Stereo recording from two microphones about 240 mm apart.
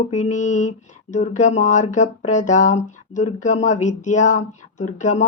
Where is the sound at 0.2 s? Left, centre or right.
Left.